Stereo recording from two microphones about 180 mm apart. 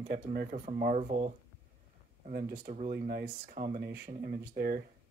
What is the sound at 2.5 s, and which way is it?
Speech, 45° right (ahead or behind).